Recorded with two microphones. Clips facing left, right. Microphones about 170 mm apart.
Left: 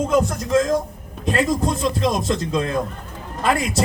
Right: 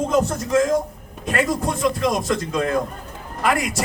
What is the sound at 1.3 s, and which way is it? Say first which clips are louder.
A man's voice: left 1 dB; 25° left (ahead or behind).